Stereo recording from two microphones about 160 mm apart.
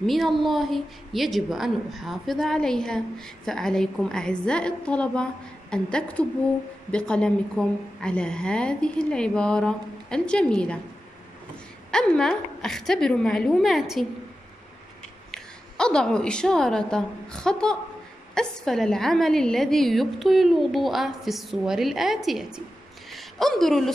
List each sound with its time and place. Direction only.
0.0 s a woman's voice: centre (ahead or behind)
11.9 s a woman's voice: 5° left (ahead or behind)
15.3 s a woman's voice: 5° left (ahead or behind)
23.0 s a sound: centre (ahead or behind)